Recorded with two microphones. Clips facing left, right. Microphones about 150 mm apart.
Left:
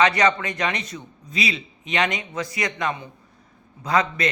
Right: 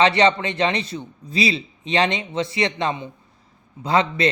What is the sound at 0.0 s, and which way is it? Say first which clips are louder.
A man's voice: right 2 dB; 25° right (ahead or behind).